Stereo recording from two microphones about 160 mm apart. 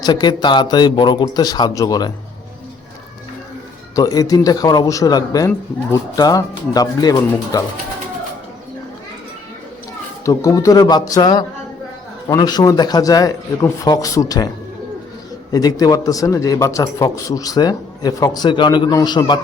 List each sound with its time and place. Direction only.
0.0 s a man's voice: 25° left (ahead or behind)
3.9 s a man's voice: 20° left (ahead or behind)
10.2 s a man's voice: 20° left (ahead or behind)
15.5 s a man's voice: 25° left (ahead or behind)